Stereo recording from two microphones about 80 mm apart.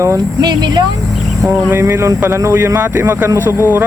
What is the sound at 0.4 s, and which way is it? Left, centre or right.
Speech, right.